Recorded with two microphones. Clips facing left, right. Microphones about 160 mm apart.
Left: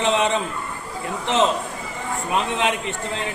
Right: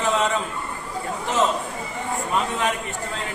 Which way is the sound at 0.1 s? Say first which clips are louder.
Left 1 dB; 20° left (ahead or behind).